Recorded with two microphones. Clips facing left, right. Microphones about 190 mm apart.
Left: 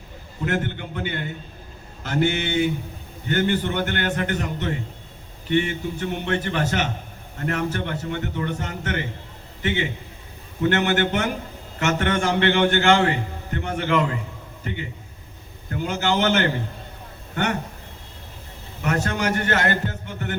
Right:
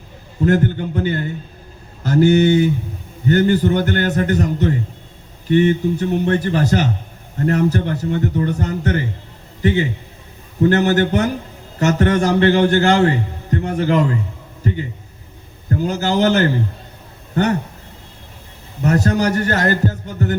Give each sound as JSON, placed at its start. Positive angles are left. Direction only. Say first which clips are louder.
{"t": 0.4, "sound": "a man's voice", "louder": "right 9 dB", "side_deg": -40}
{"t": 14.6, "sound": "a sound", "louder": "right 8 dB", "side_deg": -35}
{"t": 15.7, "sound": "a man's voice", "louder": "right 5 dB", "side_deg": -40}
{"t": 18.8, "sound": "a man's voice", "louder": "right 7 dB", "side_deg": -35}